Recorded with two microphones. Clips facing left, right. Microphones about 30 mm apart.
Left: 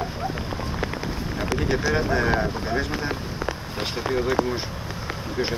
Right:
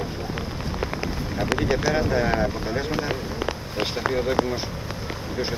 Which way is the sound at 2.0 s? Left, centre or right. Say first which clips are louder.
Even; centre.